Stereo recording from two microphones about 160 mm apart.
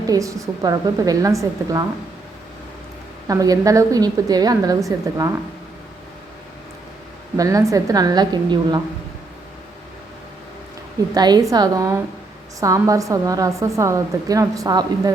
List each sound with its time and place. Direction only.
0.1 s a woman's voice: 20° right (ahead or behind)
3.2 s a woman's voice: 20° right (ahead or behind)
7.3 s a woman's voice: 20° right (ahead or behind)
11.1 s a woman's voice: 25° right (ahead or behind)